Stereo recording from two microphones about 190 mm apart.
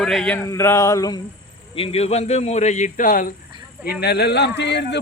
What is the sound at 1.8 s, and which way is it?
Speech, 30° left (ahead or behind).